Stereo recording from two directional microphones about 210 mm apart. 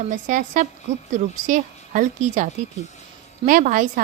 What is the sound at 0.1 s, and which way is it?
A woman's voice, 35° right (ahead or behind).